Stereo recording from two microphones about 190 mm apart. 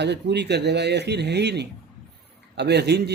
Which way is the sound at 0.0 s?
60° right (ahead or behind).